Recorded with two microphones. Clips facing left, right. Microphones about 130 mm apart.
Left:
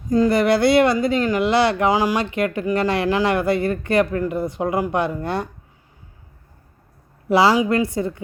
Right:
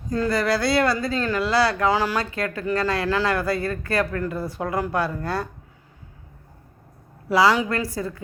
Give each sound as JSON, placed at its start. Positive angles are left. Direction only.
{"t": 0.1, "sound": "speech", "side_deg": 20}
{"t": 7.3, "sound": "speech", "side_deg": 25}